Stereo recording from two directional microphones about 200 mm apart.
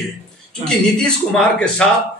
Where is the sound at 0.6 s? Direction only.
5° left (ahead or behind).